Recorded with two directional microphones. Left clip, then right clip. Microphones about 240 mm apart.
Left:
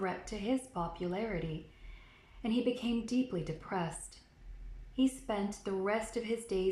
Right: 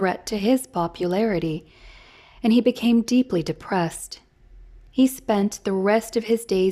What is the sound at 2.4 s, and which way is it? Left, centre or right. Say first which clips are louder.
A woman's voice: right 14 dB; right.